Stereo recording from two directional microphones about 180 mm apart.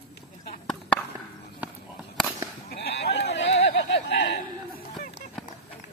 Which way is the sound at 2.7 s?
70° left (ahead or behind).